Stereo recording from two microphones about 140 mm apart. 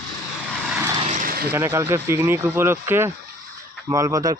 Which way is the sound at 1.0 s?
75° right (ahead or behind).